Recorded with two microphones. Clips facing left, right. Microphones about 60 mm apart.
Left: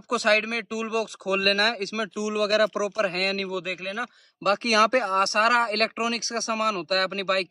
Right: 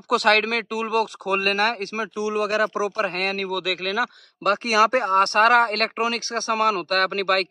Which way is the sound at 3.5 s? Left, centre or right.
Right.